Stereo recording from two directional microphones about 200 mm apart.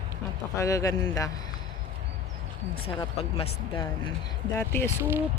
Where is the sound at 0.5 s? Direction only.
15° left (ahead or behind).